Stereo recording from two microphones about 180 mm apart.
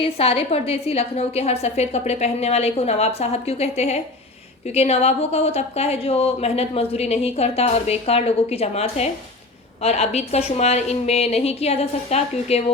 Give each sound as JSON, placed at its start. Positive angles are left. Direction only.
{"t": 0.0, "sound": "a woman's voice", "side_deg": 35}